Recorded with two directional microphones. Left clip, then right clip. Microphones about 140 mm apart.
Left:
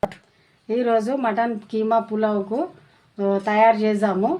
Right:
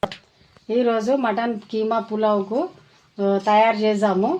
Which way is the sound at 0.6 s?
40° right (ahead or behind).